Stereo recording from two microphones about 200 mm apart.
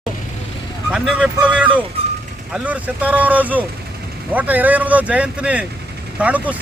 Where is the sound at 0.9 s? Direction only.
5° right (ahead or behind).